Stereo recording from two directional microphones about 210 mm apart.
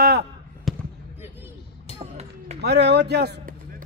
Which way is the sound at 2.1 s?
30° right (ahead or behind).